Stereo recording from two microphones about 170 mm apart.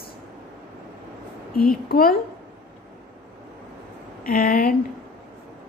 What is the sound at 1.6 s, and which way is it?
Speech, 60° left (ahead or behind).